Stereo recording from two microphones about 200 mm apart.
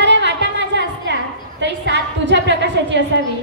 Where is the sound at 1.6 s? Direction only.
60° right (ahead or behind).